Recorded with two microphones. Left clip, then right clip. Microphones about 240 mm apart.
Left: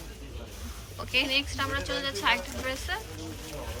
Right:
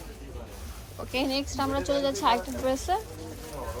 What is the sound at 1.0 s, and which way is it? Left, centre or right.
A woman's voice, centre.